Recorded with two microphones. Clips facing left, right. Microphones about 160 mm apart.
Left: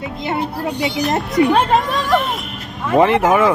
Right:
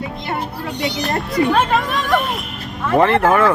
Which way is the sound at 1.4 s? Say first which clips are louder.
Left 3 dB; centre (ahead or behind).